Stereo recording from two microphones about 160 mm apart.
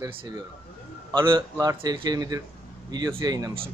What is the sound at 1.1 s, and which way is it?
A man's voice, 25° right (ahead or behind).